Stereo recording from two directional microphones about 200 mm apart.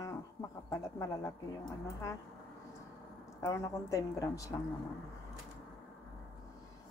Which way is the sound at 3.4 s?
15° left (ahead or behind).